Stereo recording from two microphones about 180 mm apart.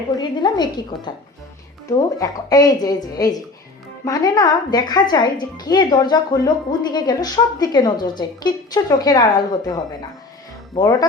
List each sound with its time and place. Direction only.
0.2 s speech: 25° left (ahead or behind)